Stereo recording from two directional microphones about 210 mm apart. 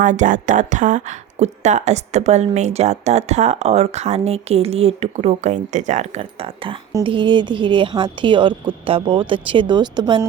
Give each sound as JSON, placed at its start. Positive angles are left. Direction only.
{"t": 0.0, "sound": "a woman's voice", "side_deg": -35}